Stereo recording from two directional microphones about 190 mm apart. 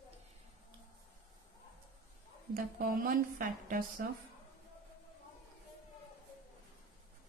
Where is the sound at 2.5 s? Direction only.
50° right (ahead or behind).